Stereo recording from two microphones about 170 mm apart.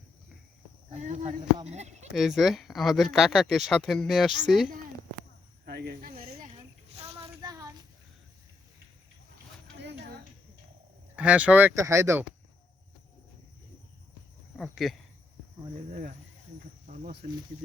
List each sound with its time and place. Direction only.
0.9 s speech: 40° right (ahead or behind)
2.1 s speech: centre (ahead or behind)
5.6 s a sound: 65° right (ahead or behind)
6.9 s child singing: 35° right (ahead or behind)
7.4 s child singing: 20° right (ahead or behind)
11.2 s speech: 5° right (ahead or behind)
14.5 s speech: centre (ahead or behind)
15.9 s speech: 50° right (ahead or behind)